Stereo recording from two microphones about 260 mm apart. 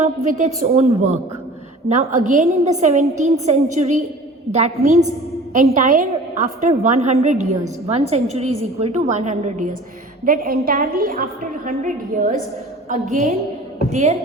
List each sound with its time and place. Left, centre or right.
0.3 s a woman's voice: right